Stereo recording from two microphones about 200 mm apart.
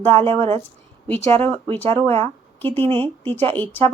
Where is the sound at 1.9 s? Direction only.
25° right (ahead or behind).